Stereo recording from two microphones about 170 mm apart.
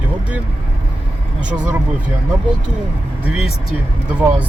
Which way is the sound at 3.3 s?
Centre (ahead or behind).